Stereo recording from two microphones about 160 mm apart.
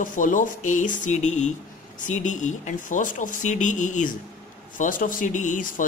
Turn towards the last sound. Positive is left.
turn(degrees=55)  # may be behind; listen again after turning